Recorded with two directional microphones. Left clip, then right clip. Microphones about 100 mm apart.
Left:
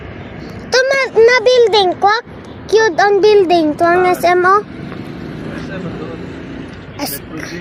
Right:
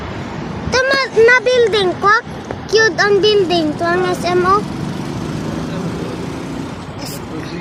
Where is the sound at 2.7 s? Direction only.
45° left (ahead or behind).